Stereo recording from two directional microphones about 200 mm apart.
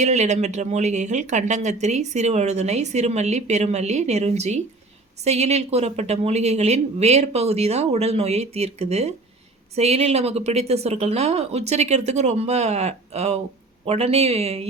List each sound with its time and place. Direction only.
0.0 s speech: 35° right (ahead or behind)